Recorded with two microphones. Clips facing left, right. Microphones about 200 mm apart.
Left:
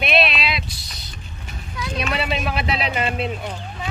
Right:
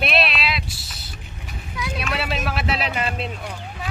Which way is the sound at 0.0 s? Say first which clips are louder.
Left 2 dB; centre (ahead or behind).